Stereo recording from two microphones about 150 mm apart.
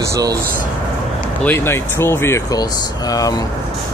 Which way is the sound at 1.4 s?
15° left (ahead or behind).